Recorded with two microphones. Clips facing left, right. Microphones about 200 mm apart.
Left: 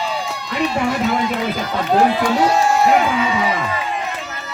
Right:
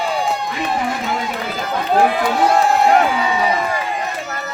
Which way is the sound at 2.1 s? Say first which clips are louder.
Even; 55° right (ahead or behind).